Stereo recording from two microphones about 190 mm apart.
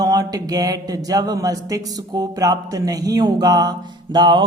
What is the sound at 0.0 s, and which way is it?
Speech, 20° right (ahead or behind).